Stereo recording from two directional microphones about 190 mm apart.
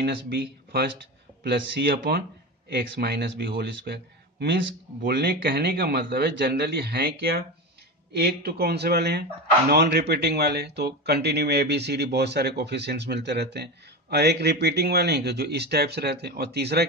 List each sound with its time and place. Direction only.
0.0 s speech: 60° right (ahead or behind)